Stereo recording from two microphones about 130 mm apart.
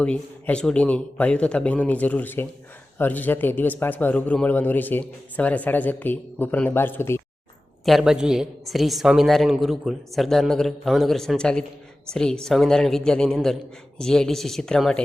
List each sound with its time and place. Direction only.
0.0 s a man's voice: 10° left (ahead or behind)
7.9 s a woman's voice: centre (ahead or behind)